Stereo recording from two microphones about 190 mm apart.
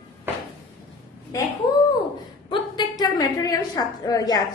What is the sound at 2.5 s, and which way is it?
A woman's voice, 20° left (ahead or behind).